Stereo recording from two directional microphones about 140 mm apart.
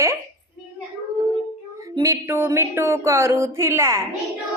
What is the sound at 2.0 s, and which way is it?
A woman's voice, 20° right (ahead or behind).